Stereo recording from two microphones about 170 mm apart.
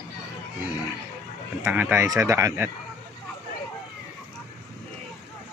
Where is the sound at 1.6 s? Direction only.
10° right (ahead or behind).